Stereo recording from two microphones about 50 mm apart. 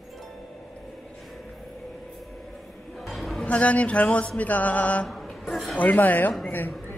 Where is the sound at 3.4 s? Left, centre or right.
Left.